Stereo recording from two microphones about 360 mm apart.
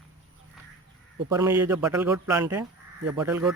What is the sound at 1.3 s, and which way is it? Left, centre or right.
Speech, centre.